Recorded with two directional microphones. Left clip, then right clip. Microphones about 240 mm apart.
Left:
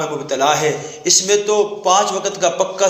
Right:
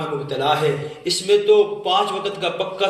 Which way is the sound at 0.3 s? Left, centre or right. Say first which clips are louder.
Left 4 dB; left.